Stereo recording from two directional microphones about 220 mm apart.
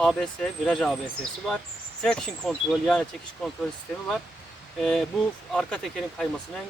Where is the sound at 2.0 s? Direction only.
5° left (ahead or behind).